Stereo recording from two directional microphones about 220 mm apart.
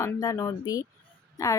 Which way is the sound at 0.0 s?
15° left (ahead or behind).